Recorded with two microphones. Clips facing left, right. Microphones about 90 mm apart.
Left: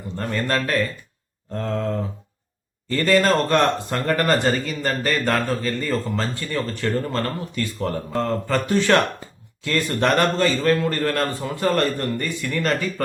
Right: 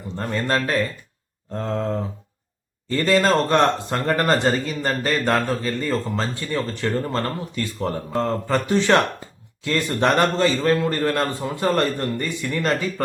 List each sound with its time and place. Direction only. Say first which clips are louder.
0.2 s speech: right 1 dB; 20° right (ahead or behind)